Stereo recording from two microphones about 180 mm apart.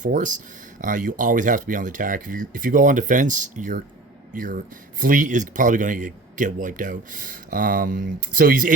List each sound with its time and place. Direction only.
0.0 s speech: 45° right (ahead or behind)